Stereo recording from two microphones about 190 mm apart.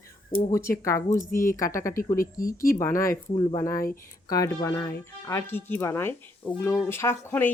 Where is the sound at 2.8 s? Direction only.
15° left (ahead or behind).